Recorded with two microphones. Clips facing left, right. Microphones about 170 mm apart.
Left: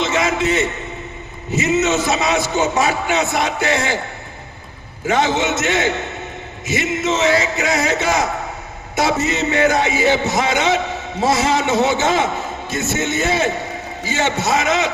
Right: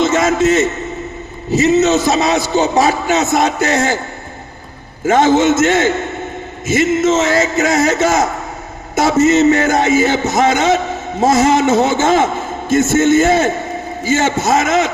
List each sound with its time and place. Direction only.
0.0 s a man's voice: 45° right (ahead or behind)
5.0 s a man's voice: 45° right (ahead or behind)